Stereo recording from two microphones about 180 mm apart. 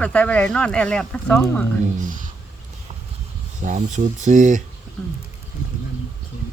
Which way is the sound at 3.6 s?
40° right (ahead or behind).